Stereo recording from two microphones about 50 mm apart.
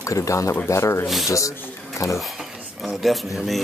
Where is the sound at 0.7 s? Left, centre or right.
Left.